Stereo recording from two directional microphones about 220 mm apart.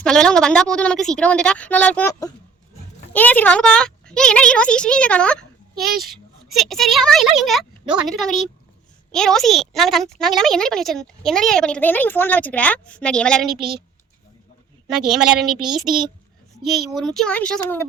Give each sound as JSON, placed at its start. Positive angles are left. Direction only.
{"t": 0.0, "sound": "speech", "side_deg": 5}
{"t": 5.7, "sound": "a child's voice", "side_deg": -45}
{"t": 6.0, "sound": "speech", "side_deg": 0}
{"t": 14.9, "sound": "speech", "side_deg": 0}